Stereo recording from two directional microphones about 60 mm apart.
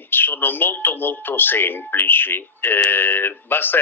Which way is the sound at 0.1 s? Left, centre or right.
Left.